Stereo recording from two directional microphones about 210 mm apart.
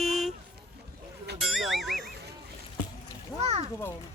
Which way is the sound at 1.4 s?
Centre (ahead or behind).